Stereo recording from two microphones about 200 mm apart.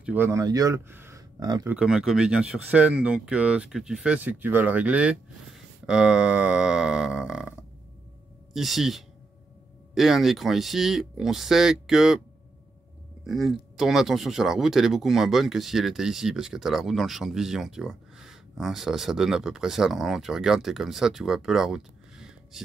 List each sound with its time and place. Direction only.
0.0 s speech: 10° right (ahead or behind)
1.7 s speech: 5° right (ahead or behind)
8.5 s speech: centre (ahead or behind)
13.2 s speech: centre (ahead or behind)